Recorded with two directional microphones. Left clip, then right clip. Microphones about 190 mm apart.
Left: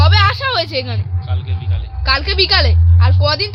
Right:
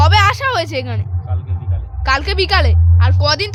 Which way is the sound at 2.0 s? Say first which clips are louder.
Left 1 dB; 20° right (ahead or behind).